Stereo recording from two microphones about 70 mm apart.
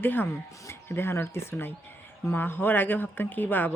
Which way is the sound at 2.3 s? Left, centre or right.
Left.